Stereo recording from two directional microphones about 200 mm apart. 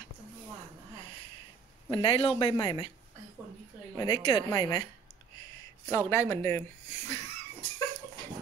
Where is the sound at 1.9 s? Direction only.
25° left (ahead or behind).